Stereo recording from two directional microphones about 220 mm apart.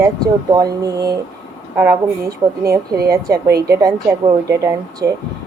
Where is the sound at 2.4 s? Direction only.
20° right (ahead or behind).